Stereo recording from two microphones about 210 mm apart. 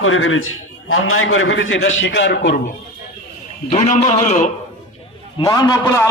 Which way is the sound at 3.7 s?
35° left (ahead or behind).